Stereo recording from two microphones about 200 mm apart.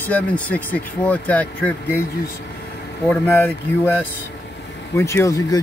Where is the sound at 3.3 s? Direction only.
10° left (ahead or behind).